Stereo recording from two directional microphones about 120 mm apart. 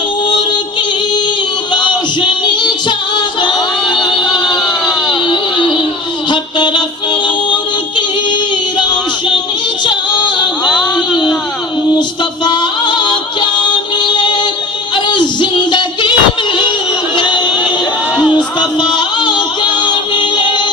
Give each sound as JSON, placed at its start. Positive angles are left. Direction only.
{"t": 0.3, "sound": "music", "side_deg": 40}
{"t": 1.7, "sound": "music", "side_deg": 40}
{"t": 5.0, "sound": "a sound", "side_deg": 40}
{"t": 6.3, "sound": "music", "side_deg": 40}
{"t": 9.8, "sound": "child singing", "side_deg": 40}
{"t": 12.5, "sound": "music", "side_deg": 40}
{"t": 14.9, "sound": "a sound", "side_deg": 40}
{"t": 17.2, "sound": "a sound", "side_deg": 40}
{"t": 18.3, "sound": "music", "side_deg": 40}